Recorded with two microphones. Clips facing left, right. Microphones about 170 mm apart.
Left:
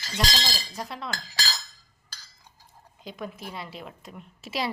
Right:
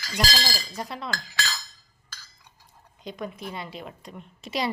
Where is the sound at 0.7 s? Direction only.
Centre (ahead or behind).